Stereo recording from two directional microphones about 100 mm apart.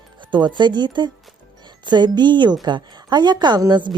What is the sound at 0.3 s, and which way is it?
Speech, 50° right (ahead or behind).